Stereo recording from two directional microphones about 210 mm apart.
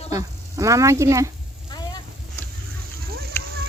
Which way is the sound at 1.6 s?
20° left (ahead or behind).